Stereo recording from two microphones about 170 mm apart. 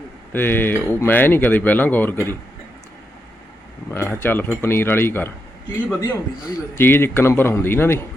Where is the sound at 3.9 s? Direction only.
10° left (ahead or behind).